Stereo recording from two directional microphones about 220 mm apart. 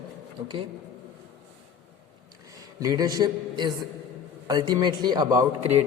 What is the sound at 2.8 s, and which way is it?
A man's voice, 15° right (ahead or behind).